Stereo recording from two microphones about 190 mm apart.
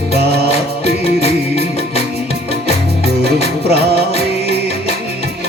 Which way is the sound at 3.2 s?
60° right (ahead or behind).